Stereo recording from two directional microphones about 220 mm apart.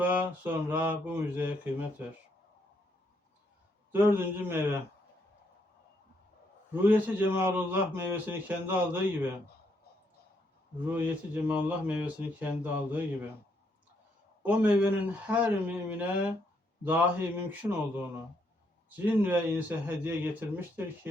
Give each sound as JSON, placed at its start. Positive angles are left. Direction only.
{"t": 0.0, "sound": "speech", "side_deg": -5}
{"t": 3.9, "sound": "speech", "side_deg": -10}
{"t": 6.7, "sound": "speech", "side_deg": -5}
{"t": 10.8, "sound": "speech", "side_deg": -5}
{"t": 14.4, "sound": "speech", "side_deg": -5}